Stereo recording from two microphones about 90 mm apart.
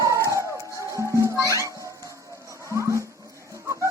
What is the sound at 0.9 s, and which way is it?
Music, 35° right (ahead or behind).